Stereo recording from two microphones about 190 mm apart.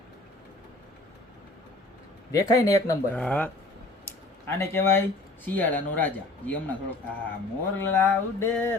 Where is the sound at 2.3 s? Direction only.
20° left (ahead or behind).